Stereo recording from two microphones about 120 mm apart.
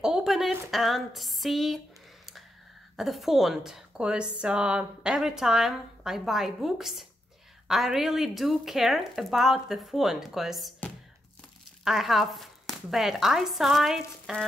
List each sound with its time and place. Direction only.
0.0 s a sound: 5° right (ahead or behind)
0.7 s a woman's voice: centre (ahead or behind)
3.0 s a woman's voice: centre (ahead or behind)
11.8 s a woman's voice: centre (ahead or behind)